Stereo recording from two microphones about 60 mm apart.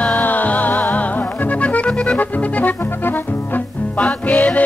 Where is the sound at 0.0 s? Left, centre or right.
Left.